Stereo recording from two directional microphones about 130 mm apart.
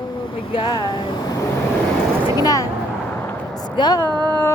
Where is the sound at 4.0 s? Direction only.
35° right (ahead or behind).